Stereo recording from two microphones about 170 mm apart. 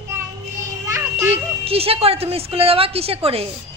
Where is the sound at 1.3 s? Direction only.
35° right (ahead or behind).